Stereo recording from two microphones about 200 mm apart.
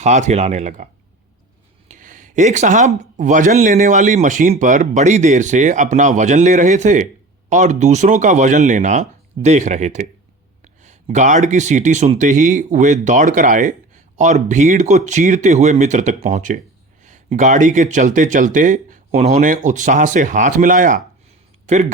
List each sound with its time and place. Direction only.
0.0 s speech: 35° right (ahead or behind)
1.9 s a sound: 40° right (ahead or behind)
3.2 s speech: 40° right (ahead or behind)